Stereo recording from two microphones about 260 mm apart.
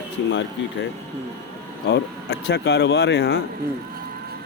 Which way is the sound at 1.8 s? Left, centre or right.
Left.